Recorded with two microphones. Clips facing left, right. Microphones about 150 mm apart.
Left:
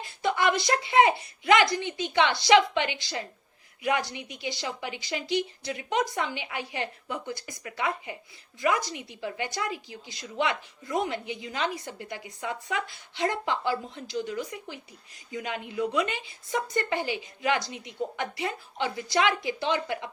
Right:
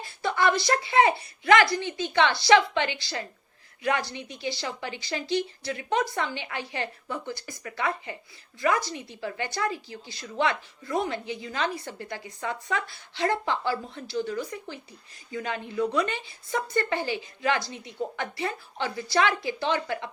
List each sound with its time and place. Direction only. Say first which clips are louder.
0.0 s a woman's voice: right 1 dB; 20° left (ahead or behind)